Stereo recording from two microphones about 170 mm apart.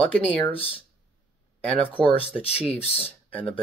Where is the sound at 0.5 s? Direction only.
35° left (ahead or behind).